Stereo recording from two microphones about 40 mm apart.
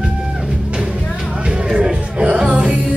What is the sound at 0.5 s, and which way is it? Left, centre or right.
Music, centre.